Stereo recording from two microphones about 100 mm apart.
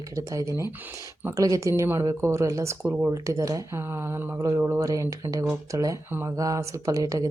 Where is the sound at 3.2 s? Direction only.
35° right (ahead or behind).